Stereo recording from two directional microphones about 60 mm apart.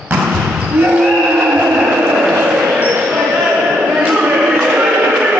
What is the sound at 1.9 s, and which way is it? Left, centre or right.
Vehicle, centre.